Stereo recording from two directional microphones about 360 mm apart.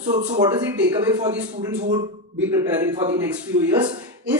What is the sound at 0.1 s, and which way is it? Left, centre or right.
Speech, centre.